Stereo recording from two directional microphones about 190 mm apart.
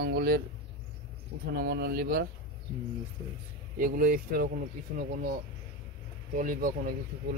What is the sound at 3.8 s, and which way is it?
Speech, 50° right (ahead or behind).